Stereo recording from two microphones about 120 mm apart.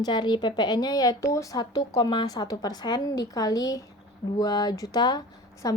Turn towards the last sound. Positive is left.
turn(degrees=30)  # may be behind; listen again after turning